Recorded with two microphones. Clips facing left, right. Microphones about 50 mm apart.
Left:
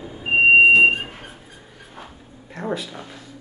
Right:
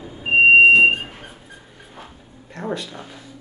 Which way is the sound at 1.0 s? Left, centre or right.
Centre.